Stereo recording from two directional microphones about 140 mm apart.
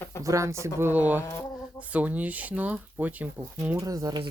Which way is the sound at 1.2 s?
15° left (ahead or behind).